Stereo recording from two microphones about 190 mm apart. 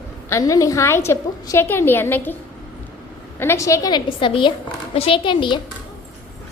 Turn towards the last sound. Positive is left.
turn(degrees=25)  # may be behind; listen again after turning